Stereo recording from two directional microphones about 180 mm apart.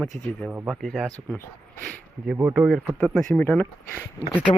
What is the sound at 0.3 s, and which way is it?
Speech, 10° left (ahead or behind).